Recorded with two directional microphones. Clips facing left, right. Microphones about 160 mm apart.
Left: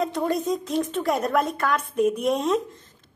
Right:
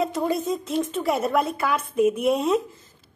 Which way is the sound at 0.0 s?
5° right (ahead or behind).